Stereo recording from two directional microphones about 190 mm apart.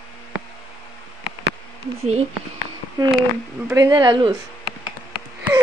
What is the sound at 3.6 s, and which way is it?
Speech, 15° right (ahead or behind).